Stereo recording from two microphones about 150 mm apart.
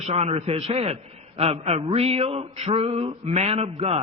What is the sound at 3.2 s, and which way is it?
Speech, 45° right (ahead or behind).